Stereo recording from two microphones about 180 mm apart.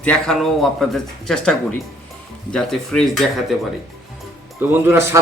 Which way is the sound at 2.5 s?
5° left (ahead or behind).